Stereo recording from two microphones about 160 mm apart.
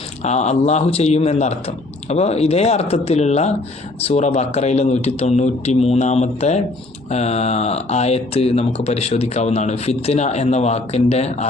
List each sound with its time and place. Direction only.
0.2 s speech: 45° left (ahead or behind)